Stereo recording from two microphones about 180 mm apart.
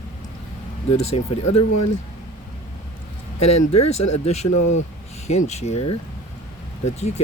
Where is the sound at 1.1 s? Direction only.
35° left (ahead or behind).